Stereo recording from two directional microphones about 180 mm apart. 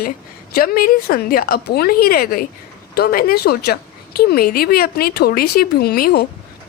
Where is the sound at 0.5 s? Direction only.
55° left (ahead or behind).